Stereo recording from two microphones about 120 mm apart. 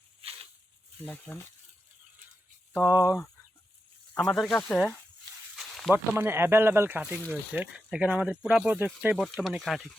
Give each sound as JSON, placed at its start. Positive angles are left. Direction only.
{"t": 1.0, "sound": "speech", "side_deg": 15}
{"t": 2.9, "sound": "speech", "side_deg": 25}
{"t": 4.1, "sound": "speech", "side_deg": 5}
{"t": 5.5, "sound": "a sound", "side_deg": 0}
{"t": 5.9, "sound": "speech", "side_deg": -20}
{"t": 7.3, "sound": "speech", "side_deg": -5}